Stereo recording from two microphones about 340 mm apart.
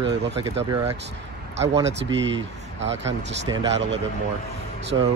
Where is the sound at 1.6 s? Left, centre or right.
Centre.